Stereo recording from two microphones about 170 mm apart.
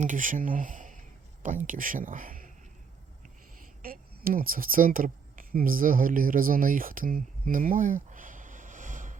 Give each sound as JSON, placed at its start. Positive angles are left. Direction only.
{"t": 0.0, "sound": "speech", "side_deg": -50}
{"t": 3.8, "sound": "speech", "side_deg": -55}